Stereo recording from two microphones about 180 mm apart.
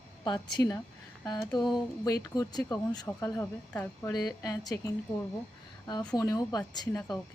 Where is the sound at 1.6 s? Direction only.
Centre (ahead or behind).